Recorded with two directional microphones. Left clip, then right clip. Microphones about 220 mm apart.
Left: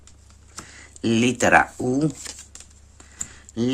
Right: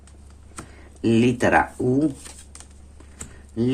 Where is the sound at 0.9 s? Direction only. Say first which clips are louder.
Right 2 dB; 30° left (ahead or behind).